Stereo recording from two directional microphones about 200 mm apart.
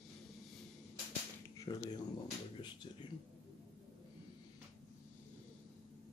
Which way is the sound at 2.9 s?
25° left (ahead or behind).